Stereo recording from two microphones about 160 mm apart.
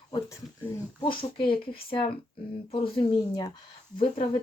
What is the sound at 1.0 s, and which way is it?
Speech, 30° left (ahead or behind).